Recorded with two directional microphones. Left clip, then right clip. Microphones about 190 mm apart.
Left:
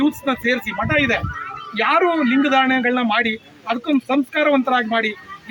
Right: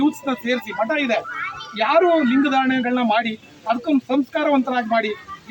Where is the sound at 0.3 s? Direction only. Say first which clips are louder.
Left 3 dB; 20° left (ahead or behind).